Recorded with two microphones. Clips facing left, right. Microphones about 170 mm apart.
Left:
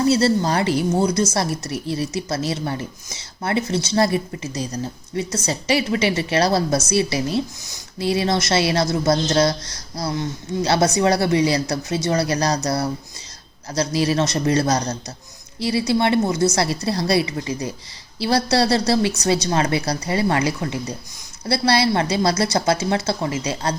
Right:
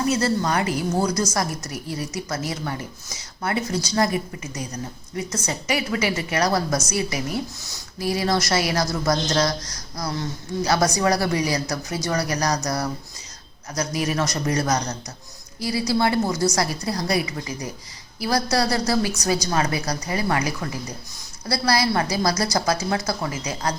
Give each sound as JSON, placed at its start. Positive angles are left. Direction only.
{"t": 0.0, "sound": "speech", "side_deg": 30}